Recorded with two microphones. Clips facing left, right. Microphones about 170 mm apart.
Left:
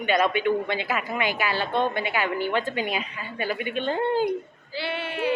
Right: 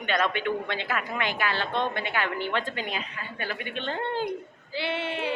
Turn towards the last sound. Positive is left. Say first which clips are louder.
# left 2 dB
turn(degrees=-25)  # may be behind; listen again after turning